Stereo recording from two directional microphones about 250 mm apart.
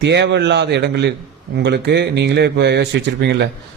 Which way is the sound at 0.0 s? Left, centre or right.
Right.